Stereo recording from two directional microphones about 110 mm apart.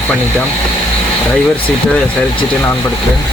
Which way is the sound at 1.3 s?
10° left (ahead or behind).